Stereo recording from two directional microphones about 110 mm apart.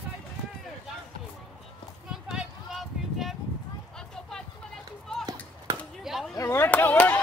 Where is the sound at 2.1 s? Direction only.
5° right (ahead or behind).